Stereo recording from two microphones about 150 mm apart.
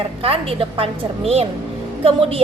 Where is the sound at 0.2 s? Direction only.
40° right (ahead or behind).